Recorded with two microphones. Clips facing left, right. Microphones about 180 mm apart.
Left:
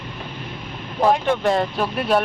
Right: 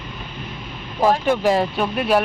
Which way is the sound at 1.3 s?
5° right (ahead or behind).